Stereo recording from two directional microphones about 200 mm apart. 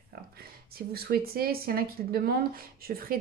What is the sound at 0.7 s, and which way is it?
Speech, 50° right (ahead or behind).